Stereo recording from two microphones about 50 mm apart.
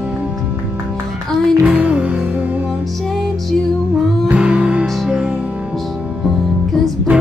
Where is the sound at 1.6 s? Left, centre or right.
Right.